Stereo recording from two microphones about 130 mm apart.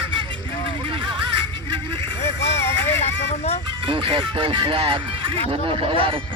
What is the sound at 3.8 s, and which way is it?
Speech, 40° right (ahead or behind).